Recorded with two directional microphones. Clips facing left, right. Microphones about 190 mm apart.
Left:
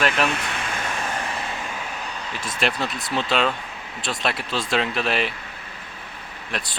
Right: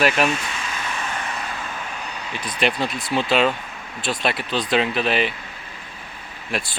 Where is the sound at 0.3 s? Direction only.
60° left (ahead or behind).